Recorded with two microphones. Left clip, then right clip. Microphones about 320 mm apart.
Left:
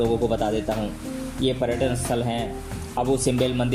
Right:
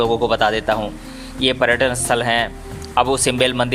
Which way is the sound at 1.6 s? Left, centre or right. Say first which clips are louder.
Right 8 dB; right.